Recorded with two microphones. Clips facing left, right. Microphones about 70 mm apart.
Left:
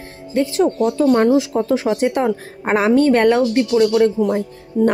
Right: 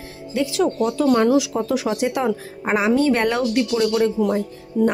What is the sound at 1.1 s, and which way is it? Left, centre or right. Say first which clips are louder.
Speech: left 3 dB; left.